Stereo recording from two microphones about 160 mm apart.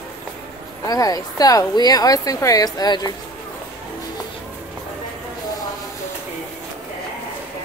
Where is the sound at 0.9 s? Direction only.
25° left (ahead or behind).